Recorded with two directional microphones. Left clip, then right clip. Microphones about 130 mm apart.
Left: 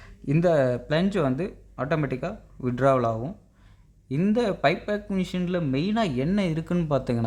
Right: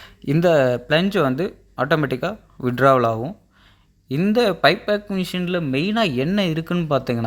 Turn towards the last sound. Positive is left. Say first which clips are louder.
# right 5 dB
turn(degrees=-20)  # may be behind; listen again after turning